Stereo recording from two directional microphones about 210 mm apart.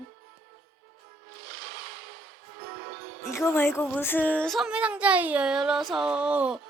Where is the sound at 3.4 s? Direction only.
10° left (ahead or behind).